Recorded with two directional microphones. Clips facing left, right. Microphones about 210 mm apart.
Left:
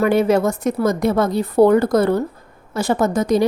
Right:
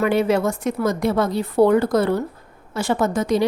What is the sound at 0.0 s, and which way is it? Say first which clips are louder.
A woman's voice: left 3 dB; 45° left (ahead or behind).